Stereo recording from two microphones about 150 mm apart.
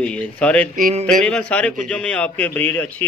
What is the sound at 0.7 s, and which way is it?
Music, 60° right (ahead or behind).